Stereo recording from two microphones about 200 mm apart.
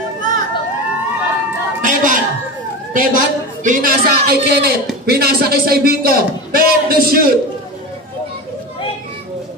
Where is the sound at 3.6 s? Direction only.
45° right (ahead or behind).